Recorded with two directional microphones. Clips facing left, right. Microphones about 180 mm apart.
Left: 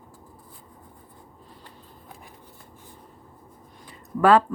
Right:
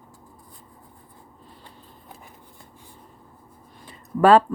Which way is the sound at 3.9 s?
30° right (ahead or behind).